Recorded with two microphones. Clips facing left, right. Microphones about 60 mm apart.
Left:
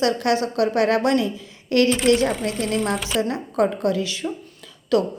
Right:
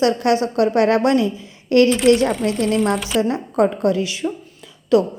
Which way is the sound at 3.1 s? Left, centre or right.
Right.